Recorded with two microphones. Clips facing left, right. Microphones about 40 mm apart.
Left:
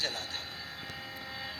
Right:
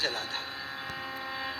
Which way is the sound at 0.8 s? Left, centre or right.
Right.